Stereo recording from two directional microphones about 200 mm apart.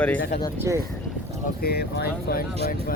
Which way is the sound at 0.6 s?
15° right (ahead or behind).